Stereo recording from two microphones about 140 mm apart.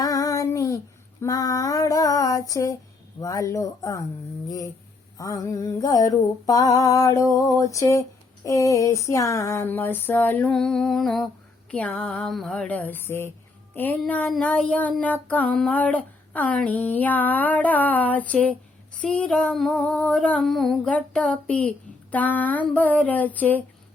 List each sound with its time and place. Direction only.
0.0 s female singing: 25° left (ahead or behind)
3.2 s a sound: 25° left (ahead or behind)
8.4 s child singing: 25° left (ahead or behind)
19.0 s female singing: 5° left (ahead or behind)
22.1 s child singing: 10° left (ahead or behind)